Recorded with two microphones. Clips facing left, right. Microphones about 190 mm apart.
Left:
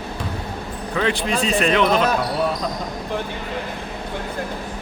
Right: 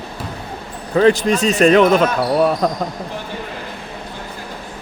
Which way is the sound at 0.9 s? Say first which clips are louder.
Right 8 dB; 40° right (ahead or behind).